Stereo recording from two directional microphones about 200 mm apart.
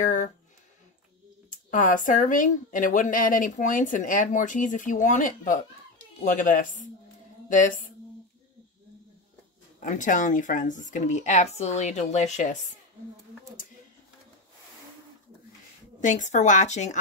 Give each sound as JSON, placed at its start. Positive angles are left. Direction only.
{"t": 0.0, "sound": "a sound", "side_deg": 40}
{"t": 1.5, "sound": "speech", "side_deg": 40}
{"t": 9.8, "sound": "speech", "side_deg": 40}
{"t": 16.0, "sound": "speech", "side_deg": 40}